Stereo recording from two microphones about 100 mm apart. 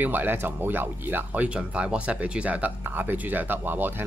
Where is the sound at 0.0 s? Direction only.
20° right (ahead or behind).